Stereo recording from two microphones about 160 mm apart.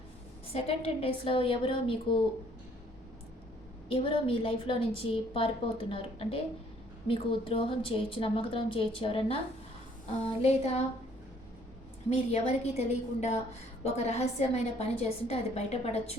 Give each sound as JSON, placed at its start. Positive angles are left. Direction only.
{"t": 0.5, "sound": "a woman's voice", "side_deg": 40}
{"t": 3.8, "sound": "a woman's voice", "side_deg": 35}
{"t": 12.1, "sound": "a woman's voice", "side_deg": 40}